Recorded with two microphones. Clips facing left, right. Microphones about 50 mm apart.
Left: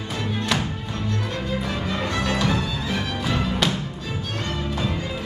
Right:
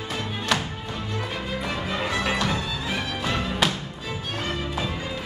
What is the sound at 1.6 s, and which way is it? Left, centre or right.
Music, centre.